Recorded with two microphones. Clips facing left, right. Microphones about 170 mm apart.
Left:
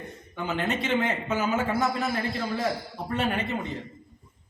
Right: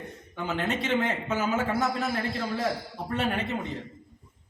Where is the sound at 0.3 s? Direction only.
Centre (ahead or behind).